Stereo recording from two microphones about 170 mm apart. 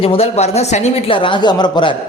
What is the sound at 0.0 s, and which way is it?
Speech, 35° left (ahead or behind).